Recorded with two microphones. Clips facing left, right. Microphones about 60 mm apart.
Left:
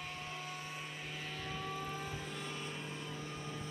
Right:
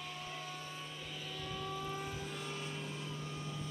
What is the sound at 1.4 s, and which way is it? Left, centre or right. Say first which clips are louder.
Vehicle: right 1 dB; left.